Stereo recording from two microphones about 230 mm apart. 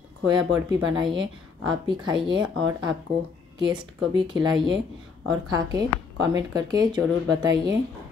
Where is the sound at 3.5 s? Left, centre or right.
Centre.